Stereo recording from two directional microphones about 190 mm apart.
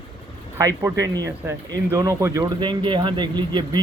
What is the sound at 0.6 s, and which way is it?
Speech, 15° right (ahead or behind).